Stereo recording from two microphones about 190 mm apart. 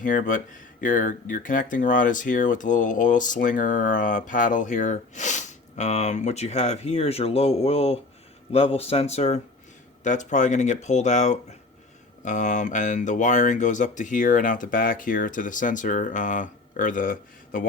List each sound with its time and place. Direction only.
0.0 s speech: 45° left (ahead or behind)